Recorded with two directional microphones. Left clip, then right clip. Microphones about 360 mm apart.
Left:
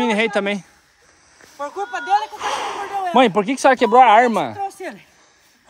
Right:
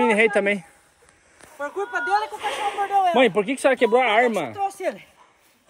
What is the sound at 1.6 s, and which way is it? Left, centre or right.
Speech, left.